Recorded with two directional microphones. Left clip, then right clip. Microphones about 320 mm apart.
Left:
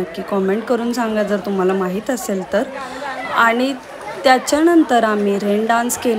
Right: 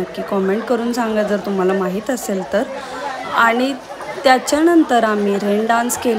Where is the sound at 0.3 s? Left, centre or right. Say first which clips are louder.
Even; centre.